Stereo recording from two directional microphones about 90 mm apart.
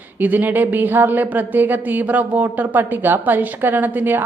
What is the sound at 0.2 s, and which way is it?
Speech, 20° right (ahead or behind).